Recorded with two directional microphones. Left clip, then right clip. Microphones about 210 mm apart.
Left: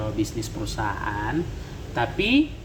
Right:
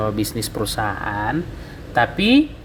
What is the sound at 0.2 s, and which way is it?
Speech, 55° right (ahead or behind).